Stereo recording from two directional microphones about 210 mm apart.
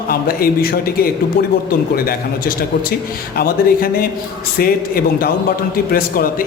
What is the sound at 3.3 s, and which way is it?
Speech, 45° left (ahead or behind).